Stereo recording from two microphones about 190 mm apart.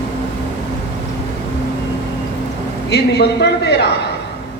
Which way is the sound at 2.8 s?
60° left (ahead or behind).